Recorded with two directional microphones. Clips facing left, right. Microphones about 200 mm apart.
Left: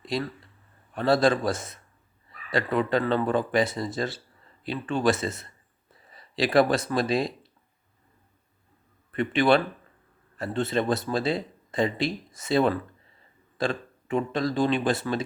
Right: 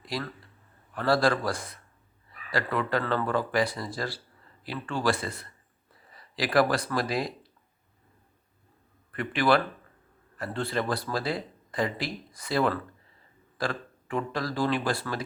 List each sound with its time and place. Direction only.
0.0 s speech: 25° left (ahead or behind)
9.1 s speech: 25° left (ahead or behind)